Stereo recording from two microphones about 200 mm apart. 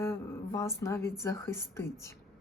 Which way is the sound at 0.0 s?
15° left (ahead or behind).